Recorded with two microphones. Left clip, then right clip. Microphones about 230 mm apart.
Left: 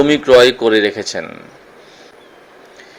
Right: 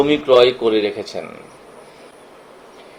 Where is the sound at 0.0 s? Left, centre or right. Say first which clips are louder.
Left 4 dB; left.